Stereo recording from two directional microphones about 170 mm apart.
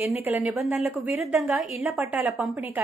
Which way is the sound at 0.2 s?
10° right (ahead or behind).